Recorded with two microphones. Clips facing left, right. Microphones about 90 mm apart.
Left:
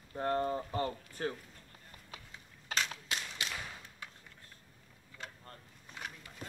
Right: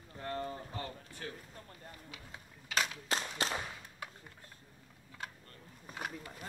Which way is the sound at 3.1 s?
35° right (ahead or behind).